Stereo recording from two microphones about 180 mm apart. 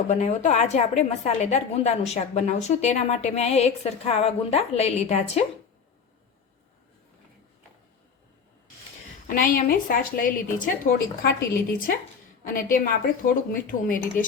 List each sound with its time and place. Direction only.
0.1 s a woman's voice: 40° left (ahead or behind)
9.2 s a woman's voice: 50° left (ahead or behind)